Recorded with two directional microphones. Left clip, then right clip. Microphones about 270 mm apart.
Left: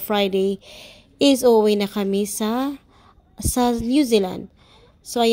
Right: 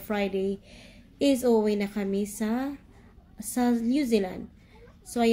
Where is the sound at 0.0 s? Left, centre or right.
Left.